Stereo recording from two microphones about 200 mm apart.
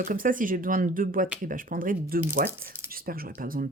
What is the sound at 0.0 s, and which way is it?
Speech, 45° right (ahead or behind).